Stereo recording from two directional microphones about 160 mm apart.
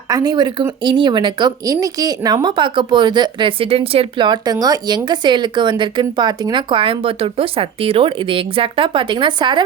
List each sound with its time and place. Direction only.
0.1 s speech: 25° right (ahead or behind)